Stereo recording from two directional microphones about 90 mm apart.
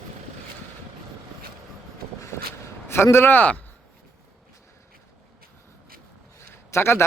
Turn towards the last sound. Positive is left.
turn(degrees=25)  # may be behind; listen again after turning